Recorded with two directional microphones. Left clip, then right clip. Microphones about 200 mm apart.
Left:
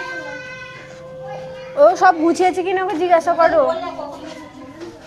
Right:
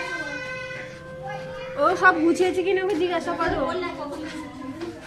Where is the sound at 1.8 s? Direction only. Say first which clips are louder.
Left 7 dB; 45° left (ahead or behind).